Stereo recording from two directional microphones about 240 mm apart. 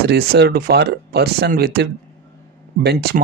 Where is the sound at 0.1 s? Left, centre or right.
Right.